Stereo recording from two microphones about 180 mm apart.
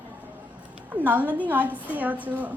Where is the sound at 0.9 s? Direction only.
10° right (ahead or behind).